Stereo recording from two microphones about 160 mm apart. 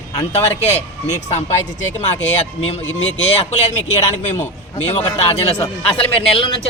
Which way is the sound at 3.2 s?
40° left (ahead or behind).